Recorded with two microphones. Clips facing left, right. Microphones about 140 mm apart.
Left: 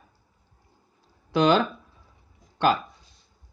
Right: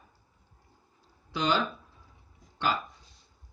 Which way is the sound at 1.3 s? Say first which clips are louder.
Left 8 dB; 55° left (ahead or behind).